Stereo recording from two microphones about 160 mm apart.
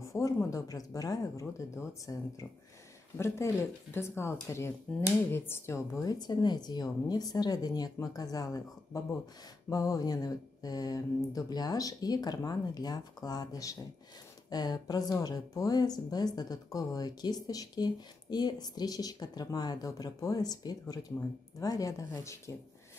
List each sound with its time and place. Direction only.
0.1 s speech: 20° left (ahead or behind)
3.2 s speech: 15° left (ahead or behind)